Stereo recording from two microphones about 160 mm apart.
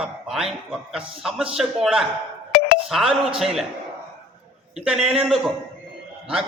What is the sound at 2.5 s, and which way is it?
Music, 60° left (ahead or behind).